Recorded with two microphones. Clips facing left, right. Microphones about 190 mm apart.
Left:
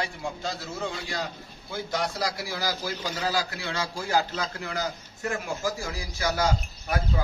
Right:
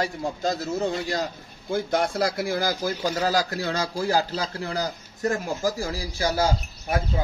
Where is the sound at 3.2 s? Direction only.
40° right (ahead or behind).